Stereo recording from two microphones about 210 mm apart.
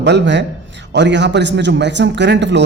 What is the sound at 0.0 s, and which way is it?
A man's voice, 55° right (ahead or behind).